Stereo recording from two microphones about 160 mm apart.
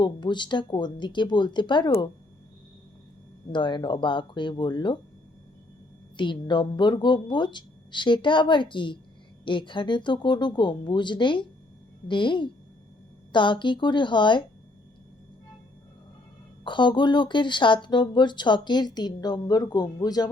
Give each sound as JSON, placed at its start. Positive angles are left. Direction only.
{"t": 0.0, "sound": "speech", "side_deg": 30}
{"t": 3.5, "sound": "speech", "side_deg": 30}
{"t": 6.1, "sound": "speech", "side_deg": 30}
{"t": 16.6, "sound": "speech", "side_deg": 30}